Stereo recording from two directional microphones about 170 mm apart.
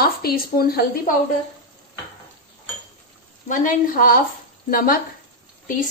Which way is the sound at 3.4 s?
50° left (ahead or behind).